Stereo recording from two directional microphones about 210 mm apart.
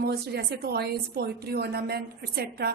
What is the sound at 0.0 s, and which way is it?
A woman's voice, 50° right (ahead or behind).